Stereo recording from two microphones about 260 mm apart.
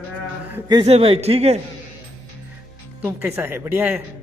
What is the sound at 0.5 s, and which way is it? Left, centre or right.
A man's voice, centre.